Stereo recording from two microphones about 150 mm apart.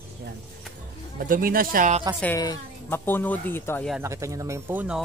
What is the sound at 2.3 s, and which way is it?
Speech, 20° left (ahead or behind).